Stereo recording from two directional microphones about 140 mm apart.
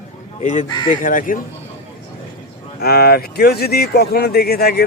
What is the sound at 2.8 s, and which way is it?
Speech, 90° left.